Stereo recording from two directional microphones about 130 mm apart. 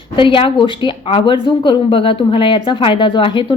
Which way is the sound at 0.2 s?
40° left (ahead or behind).